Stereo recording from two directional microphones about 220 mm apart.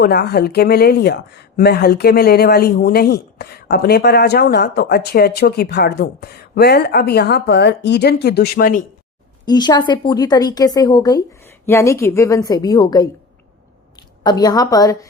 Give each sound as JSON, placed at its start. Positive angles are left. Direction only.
{"t": 0.0, "sound": "speech", "side_deg": 45}
{"t": 9.5, "sound": "a woman's voice", "side_deg": 20}
{"t": 14.3, "sound": "a woman's voice", "side_deg": 15}